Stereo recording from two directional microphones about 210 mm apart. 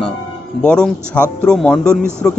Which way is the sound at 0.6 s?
5° left (ahead or behind).